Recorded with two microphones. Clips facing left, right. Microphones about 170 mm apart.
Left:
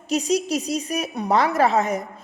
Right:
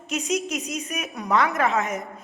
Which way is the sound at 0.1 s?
35° left (ahead or behind).